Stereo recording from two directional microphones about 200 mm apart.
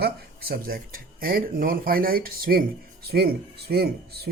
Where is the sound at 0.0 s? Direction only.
50° right (ahead or behind).